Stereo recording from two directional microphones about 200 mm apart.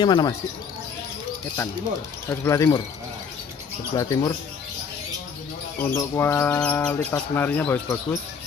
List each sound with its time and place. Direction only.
0.0 s speech: 20° left (ahead or behind)
2.2 s speech: 15° left (ahead or behind)
3.9 s speech: 15° left (ahead or behind)
5.8 s speech: 10° left (ahead or behind)